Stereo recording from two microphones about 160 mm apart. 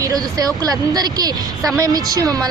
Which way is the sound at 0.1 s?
25° right (ahead or behind).